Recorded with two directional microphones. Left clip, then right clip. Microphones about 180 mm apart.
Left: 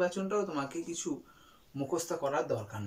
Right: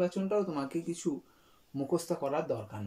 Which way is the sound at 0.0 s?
25° right (ahead or behind).